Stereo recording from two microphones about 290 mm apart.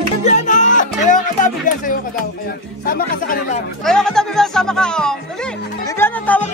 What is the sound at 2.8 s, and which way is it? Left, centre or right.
Speech, left.